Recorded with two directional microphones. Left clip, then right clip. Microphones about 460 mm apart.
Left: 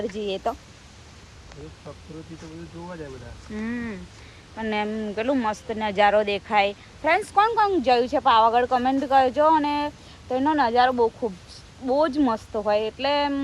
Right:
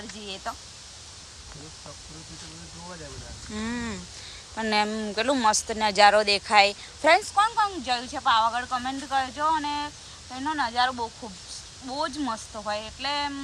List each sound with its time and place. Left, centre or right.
0.2 s speech: centre
3.5 s speech: centre
7.3 s speech: centre